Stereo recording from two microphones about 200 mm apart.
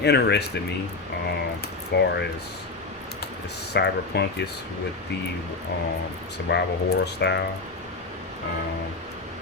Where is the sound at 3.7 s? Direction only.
55° left (ahead or behind).